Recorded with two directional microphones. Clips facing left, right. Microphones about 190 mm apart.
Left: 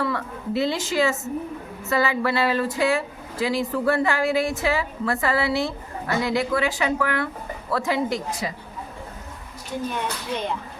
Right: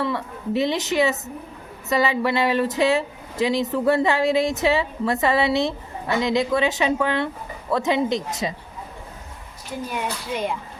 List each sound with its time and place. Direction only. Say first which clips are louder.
0.0 s speech: right 1 dB; 20° right (ahead or behind)
9.9 s speech: right 1 dB; 10° right (ahead or behind)